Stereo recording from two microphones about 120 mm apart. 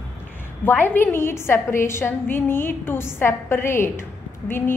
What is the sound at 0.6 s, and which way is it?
A woman's voice, 15° left (ahead or behind).